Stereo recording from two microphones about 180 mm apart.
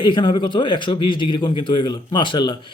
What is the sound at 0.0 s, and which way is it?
A man's voice, 25° left (ahead or behind).